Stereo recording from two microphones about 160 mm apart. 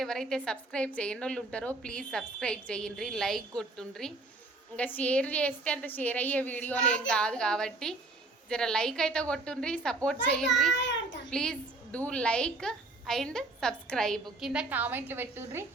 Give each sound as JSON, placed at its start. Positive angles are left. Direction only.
{"t": 0.0, "sound": "a woman's voice", "side_deg": 5}
{"t": 10.8, "sound": "a child's voice", "side_deg": 90}
{"t": 11.3, "sound": "a woman's voice", "side_deg": 5}